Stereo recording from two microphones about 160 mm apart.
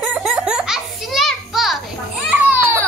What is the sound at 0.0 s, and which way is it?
Children playing, 5° right (ahead or behind).